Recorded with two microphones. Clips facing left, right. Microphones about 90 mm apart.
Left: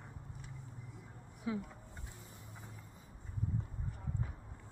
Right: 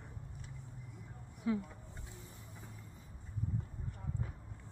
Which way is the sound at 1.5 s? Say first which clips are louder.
Right 4 dB; 10° left (ahead or behind).